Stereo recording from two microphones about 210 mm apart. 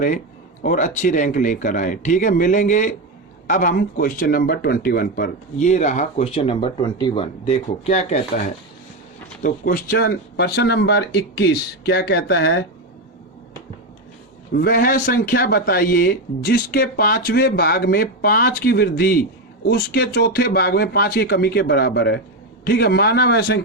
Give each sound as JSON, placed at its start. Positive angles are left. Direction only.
{"t": 0.6, "sound": "speech", "side_deg": 35}
{"t": 14.5, "sound": "speech", "side_deg": 45}